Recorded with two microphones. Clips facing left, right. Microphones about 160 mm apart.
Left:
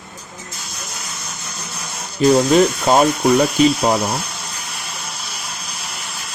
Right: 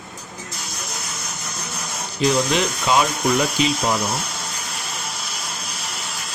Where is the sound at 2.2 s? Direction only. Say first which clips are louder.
Left 7 dB; 45° left (ahead or behind).